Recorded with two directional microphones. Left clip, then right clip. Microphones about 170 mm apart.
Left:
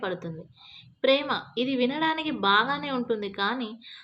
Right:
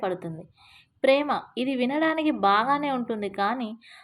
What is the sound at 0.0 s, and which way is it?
A woman's voice, 35° right (ahead or behind).